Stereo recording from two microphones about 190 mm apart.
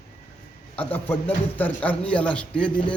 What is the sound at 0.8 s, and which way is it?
A man's voice, 10° left (ahead or behind).